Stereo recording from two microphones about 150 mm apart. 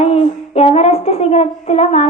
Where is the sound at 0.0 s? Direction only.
45° left (ahead or behind).